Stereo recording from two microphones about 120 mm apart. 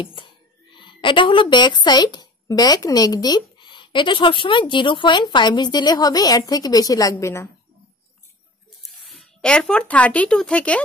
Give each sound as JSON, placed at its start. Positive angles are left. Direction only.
{"t": 0.0, "sound": "music", "side_deg": 45}
{"t": 0.7, "sound": "a woman's voice", "side_deg": 40}
{"t": 9.0, "sound": "speech", "side_deg": 0}